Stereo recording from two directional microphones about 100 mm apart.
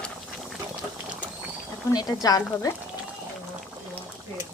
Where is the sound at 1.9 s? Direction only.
40° left (ahead or behind).